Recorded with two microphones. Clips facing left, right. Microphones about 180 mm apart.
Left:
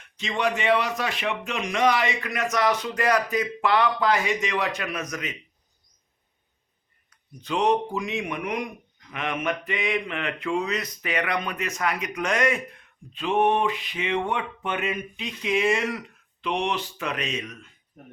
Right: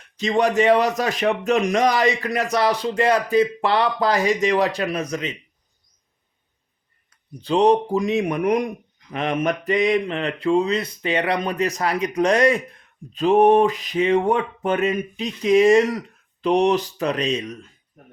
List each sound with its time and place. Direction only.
0.2 s speech: 40° right (ahead or behind)
7.4 s speech: 35° right (ahead or behind)